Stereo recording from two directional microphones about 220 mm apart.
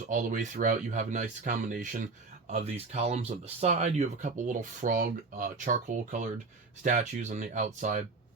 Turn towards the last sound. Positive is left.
turn(degrees=-35)  # may be behind; listen again after turning